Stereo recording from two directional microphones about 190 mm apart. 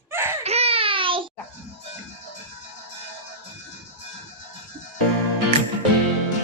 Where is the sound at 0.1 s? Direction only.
10° right (ahead or behind).